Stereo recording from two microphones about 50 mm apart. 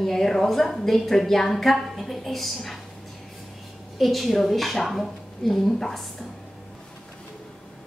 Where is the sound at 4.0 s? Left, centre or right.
Centre.